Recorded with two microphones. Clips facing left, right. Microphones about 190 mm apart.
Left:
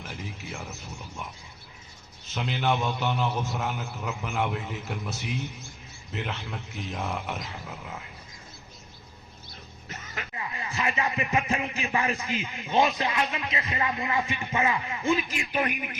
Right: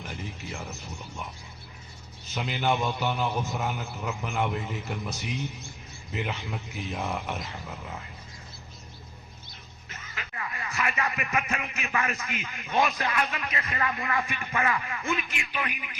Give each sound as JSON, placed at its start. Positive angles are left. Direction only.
{"t": 0.0, "sound": "a man's voice", "side_deg": 5}
{"t": 2.3, "sound": "a man's voice", "side_deg": -5}
{"t": 10.3, "sound": "speech", "side_deg": 25}